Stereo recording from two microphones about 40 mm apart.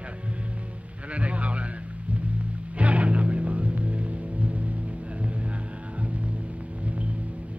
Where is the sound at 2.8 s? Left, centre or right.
Right.